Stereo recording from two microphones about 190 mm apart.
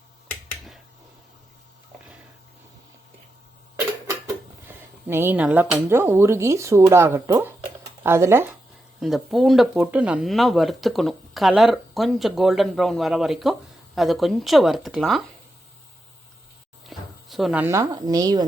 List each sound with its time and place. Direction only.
0.3 s finger snapping: centre (ahead or behind)
3.8 s a sound: 10° right (ahead or behind)
5.0 s speech: 10° right (ahead or behind)
9.0 s speech: centre (ahead or behind)
16.9 s speech: centre (ahead or behind); by 18.4 s 20° right (ahead or behind)